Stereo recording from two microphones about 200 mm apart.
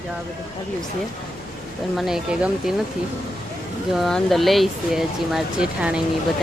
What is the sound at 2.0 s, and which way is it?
Speech, centre (ahead or behind).